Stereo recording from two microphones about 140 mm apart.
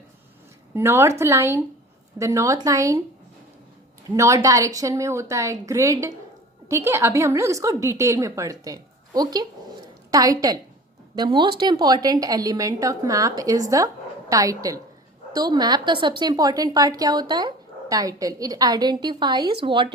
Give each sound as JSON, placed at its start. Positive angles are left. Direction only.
{"t": 0.7, "sound": "a woman's voice", "side_deg": -20}
{"t": 4.1, "sound": "a woman's voice", "side_deg": -20}